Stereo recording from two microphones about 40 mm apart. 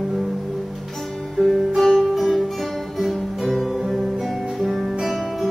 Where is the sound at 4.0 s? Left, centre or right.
Centre.